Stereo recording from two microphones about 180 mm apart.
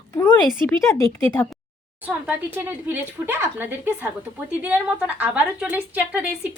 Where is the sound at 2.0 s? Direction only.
10° right (ahead or behind).